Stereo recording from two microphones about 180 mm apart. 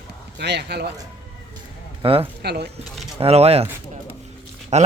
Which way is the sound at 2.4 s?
65° right (ahead or behind).